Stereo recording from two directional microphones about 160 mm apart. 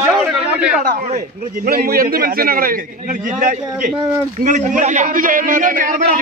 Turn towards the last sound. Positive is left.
turn(degrees=-55)  # may be behind; listen again after turning